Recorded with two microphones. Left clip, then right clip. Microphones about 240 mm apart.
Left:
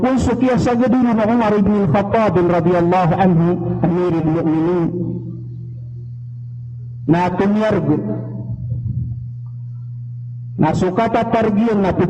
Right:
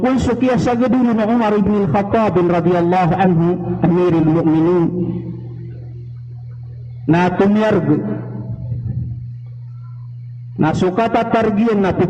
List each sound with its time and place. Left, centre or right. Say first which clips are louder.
0.0 s a man's voice: even; left
7.1 s a man's voice: right 2 dB; left
10.6 s a man's voice: right 1 dB; left